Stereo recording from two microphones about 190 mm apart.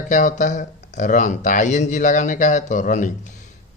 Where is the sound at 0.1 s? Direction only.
40° left (ahead or behind).